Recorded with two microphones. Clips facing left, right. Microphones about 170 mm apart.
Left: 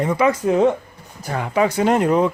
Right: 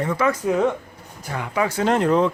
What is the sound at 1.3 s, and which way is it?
Speech, 30° left (ahead or behind).